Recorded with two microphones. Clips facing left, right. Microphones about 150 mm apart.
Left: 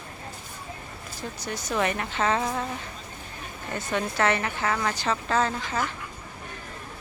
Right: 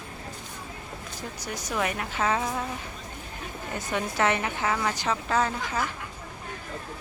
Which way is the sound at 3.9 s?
15° right (ahead or behind).